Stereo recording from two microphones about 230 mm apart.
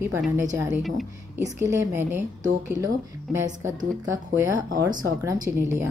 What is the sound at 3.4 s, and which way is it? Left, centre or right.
Speech, centre.